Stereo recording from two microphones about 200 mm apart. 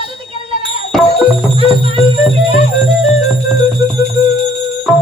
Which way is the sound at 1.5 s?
30° right (ahead or behind).